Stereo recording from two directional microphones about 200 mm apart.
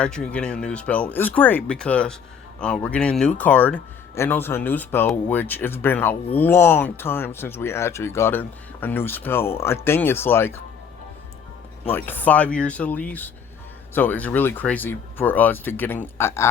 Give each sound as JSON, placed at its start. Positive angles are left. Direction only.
{"t": 0.0, "sound": "speech", "side_deg": 5}
{"t": 11.9, "sound": "speech", "side_deg": 10}